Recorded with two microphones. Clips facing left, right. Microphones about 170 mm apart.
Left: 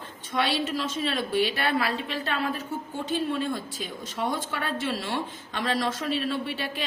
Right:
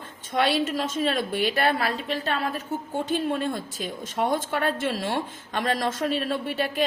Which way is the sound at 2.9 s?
50° right (ahead or behind).